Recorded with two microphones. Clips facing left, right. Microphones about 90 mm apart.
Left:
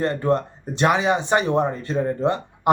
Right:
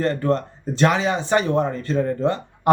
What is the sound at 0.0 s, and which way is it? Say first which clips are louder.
Speech: even; 20° left (ahead or behind).